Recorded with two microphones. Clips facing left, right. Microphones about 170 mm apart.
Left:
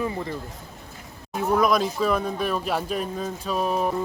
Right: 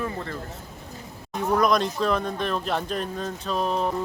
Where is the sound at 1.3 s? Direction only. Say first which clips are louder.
Left 1 dB; 5° left (ahead or behind).